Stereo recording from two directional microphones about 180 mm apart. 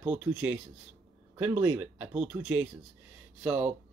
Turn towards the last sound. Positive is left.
turn(degrees=-10)  # may be behind; listen again after turning